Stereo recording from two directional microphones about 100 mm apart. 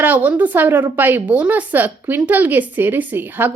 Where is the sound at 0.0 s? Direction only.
15° right (ahead or behind).